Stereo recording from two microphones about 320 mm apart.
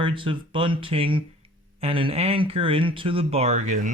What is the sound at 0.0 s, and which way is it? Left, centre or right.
Speech, centre.